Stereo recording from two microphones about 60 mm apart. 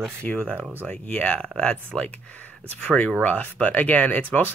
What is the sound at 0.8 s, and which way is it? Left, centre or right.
Speech, left.